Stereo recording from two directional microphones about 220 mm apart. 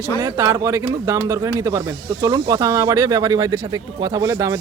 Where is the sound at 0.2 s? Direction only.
15° right (ahead or behind).